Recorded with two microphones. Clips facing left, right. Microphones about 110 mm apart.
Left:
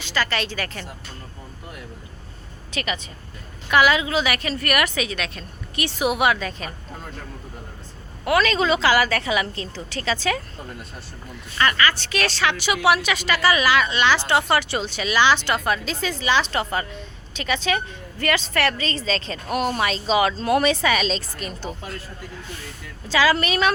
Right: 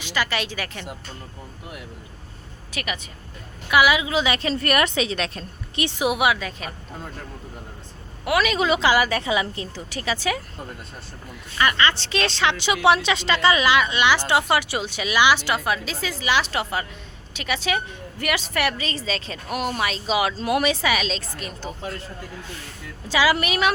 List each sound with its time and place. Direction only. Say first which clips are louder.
0.0 s a woman's voice: left 1 dB; 15° right (ahead or behind)
2.7 s a woman's voice: left 2 dB; 10° right (ahead or behind); by 5.8 s 35° right (ahead or behind)
5.8 s a woman's voice: even; 15° right (ahead or behind)
8.2 s a woman's voice: left 1 dB; 10° right (ahead or behind)
11.5 s a woman's voice: even; 15° right (ahead or behind)
11.8 s a woman's voice: even; 25° right (ahead or behind); by 21.9 s centre (ahead or behind)
23.0 s a woman's voice: left 1 dB; 15° right (ahead or behind)